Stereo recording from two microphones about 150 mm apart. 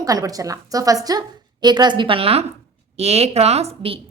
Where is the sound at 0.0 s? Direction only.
25° right (ahead or behind).